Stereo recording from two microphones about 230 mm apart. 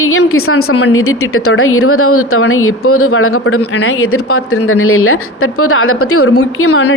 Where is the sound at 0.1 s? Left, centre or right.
Left.